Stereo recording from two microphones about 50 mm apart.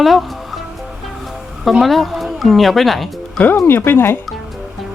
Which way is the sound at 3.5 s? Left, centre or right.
Left.